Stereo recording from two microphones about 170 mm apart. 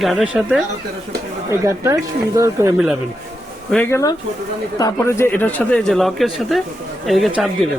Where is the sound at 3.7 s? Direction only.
15° left (ahead or behind).